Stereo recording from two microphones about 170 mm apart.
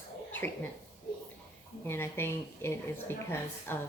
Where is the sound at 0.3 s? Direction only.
10° left (ahead or behind).